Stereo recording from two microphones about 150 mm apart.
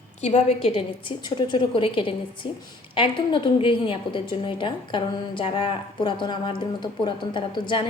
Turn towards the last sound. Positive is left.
turn(degrees=30)  # may be behind; listen again after turning